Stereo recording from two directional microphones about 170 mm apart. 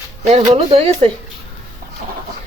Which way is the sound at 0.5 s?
35° right (ahead or behind).